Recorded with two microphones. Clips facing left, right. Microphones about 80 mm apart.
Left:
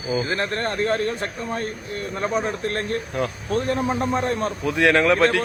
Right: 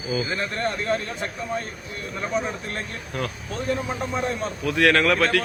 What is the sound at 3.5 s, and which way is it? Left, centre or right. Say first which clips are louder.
Speech: left 5 dB; left.